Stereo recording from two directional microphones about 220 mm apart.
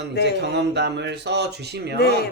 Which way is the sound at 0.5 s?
50° right (ahead or behind).